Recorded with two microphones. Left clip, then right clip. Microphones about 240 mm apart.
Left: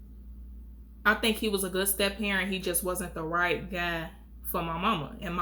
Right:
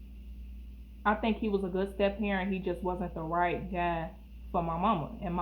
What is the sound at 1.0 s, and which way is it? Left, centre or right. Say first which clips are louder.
A woman's voice: left 4 dB; left.